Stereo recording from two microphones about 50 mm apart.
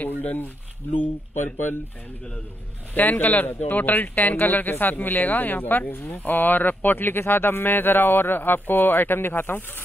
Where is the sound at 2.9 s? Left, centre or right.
Left.